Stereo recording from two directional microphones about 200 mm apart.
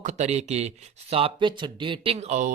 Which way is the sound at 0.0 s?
35° right (ahead or behind).